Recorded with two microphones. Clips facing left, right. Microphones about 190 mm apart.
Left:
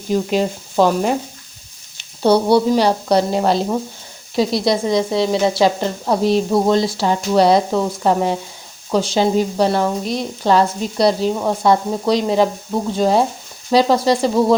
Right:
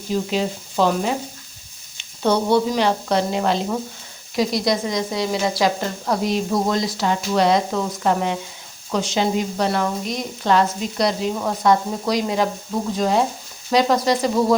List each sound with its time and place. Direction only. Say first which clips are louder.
0.1 s speech: left 4 dB; 50° left (ahead or behind)
2.2 s a woman's voice: left 4 dB; 35° left (ahead or behind)